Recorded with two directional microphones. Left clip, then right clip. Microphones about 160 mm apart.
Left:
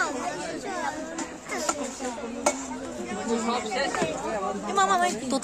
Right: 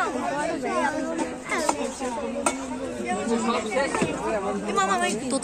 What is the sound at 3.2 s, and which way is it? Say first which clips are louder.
Speech: right 1 dB; 90° left.